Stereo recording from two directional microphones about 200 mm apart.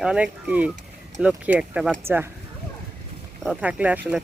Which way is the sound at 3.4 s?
5° right (ahead or behind).